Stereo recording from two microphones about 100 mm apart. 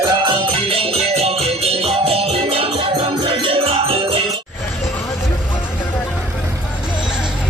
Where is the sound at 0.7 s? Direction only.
70° right (ahead or behind).